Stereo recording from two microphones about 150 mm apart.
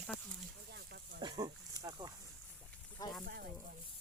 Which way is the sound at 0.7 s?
90° right.